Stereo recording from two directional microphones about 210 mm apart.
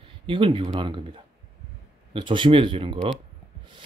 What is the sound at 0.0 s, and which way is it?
Speech, 25° right (ahead or behind).